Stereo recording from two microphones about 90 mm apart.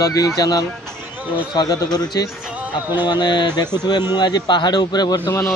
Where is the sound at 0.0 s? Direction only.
40° left (ahead or behind).